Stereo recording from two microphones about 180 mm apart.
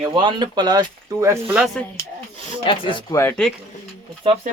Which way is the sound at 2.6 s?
30° left (ahead or behind).